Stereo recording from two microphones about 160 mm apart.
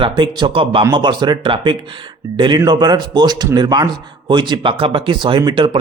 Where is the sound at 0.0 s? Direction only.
30° right (ahead or behind).